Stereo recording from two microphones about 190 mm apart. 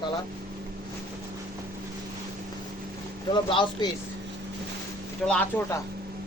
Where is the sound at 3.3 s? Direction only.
25° left (ahead or behind).